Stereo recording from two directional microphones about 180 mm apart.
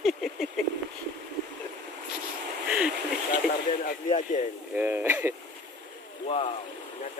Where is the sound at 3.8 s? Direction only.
45° left (ahead or behind).